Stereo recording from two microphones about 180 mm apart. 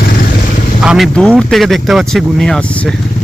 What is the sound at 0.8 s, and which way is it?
Speech, 5° right (ahead or behind).